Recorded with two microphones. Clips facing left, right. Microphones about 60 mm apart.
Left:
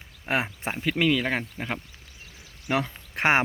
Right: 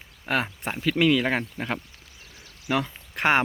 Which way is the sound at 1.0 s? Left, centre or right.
Centre.